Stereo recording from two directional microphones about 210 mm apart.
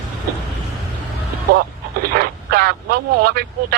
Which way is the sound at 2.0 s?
45° right (ahead or behind).